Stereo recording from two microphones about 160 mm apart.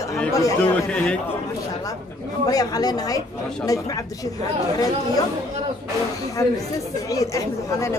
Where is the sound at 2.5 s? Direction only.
25° left (ahead or behind).